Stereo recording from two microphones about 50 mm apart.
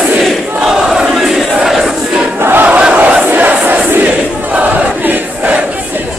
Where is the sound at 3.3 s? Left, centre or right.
Right.